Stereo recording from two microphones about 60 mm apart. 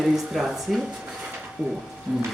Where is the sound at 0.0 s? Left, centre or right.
Centre.